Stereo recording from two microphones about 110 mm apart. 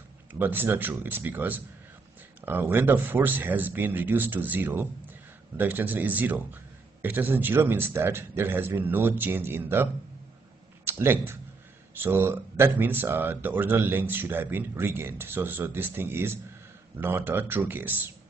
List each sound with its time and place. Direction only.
0.3 s a man's voice: 15° right (ahead or behind)
10.9 s speech: 20° right (ahead or behind)